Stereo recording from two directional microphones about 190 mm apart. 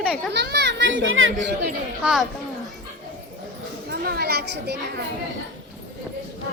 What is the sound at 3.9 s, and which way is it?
Children playing, 55° right (ahead or behind).